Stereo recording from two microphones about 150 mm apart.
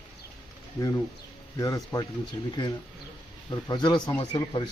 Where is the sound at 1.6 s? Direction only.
20° left (ahead or behind).